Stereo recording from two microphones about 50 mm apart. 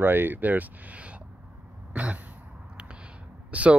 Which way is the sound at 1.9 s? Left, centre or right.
Right.